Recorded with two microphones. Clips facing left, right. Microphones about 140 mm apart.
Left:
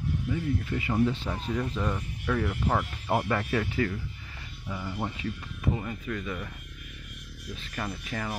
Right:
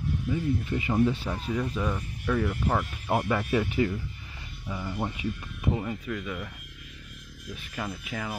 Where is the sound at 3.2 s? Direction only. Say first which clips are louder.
Right 2 dB; 10° right (ahead or behind).